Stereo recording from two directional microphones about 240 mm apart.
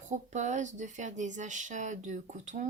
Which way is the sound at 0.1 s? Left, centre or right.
Right.